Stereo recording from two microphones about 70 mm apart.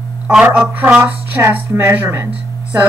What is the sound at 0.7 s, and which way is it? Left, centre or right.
A woman's voice, right.